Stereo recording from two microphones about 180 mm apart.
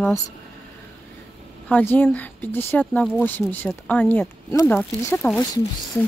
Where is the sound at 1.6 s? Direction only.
10° left (ahead or behind).